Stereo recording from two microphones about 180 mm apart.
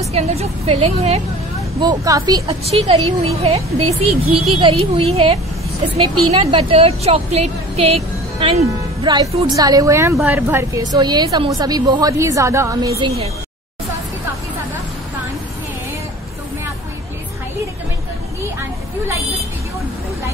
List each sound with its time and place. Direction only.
0.1 s speech: 35° right (ahead or behind)
1.8 s a woman's voice: 20° right (ahead or behind)
2.4 s a woman's voice: 35° right (ahead or behind); by 13.1 s 20° right (ahead or behind)